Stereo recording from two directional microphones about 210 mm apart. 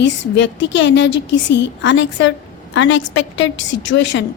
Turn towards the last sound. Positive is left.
turn(degrees=60)  # may be behind; listen again after turning